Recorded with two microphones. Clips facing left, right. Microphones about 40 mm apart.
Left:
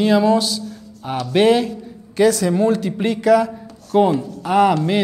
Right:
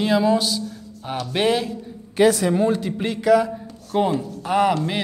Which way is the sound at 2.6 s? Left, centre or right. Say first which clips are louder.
Left 3 dB; centre.